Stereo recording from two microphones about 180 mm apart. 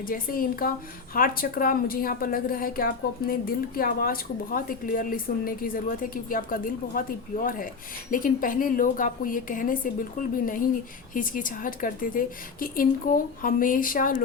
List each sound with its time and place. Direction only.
0.0 s a woman's voice: 50° left (ahead or behind)